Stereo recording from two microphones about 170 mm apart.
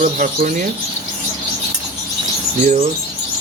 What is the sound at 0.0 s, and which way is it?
Speech, 50° right (ahead or behind).